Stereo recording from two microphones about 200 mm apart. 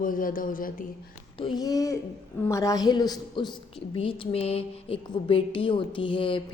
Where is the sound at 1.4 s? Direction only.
20° left (ahead or behind).